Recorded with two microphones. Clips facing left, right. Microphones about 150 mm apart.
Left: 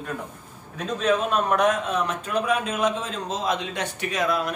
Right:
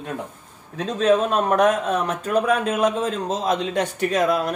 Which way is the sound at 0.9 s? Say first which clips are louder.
Right 4 dB; 40° right (ahead or behind).